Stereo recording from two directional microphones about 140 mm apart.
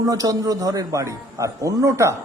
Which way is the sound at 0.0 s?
25° right (ahead or behind).